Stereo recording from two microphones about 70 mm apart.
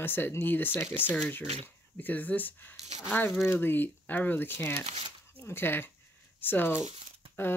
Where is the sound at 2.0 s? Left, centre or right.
Left.